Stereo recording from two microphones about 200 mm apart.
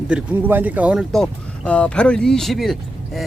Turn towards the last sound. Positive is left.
turn(degrees=0)  # may be behind; listen again after turning